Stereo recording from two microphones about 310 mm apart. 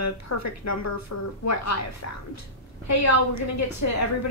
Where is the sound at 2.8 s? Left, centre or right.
Left.